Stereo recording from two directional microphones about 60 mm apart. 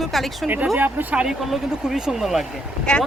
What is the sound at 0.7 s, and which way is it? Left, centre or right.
Speech, right.